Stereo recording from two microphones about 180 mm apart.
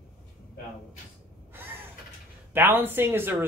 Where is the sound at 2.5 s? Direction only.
10° right (ahead or behind).